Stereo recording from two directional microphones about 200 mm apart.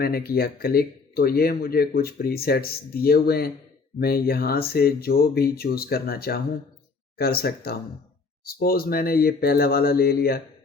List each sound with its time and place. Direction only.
0.0 s speech: 50° left (ahead or behind)